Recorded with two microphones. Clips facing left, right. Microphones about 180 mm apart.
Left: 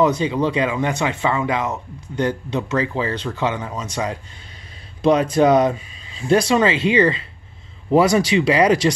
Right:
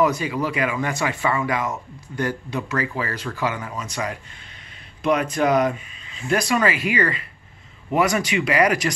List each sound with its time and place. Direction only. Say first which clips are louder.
0.0 s speech: left 3 dB; 25° left (ahead or behind)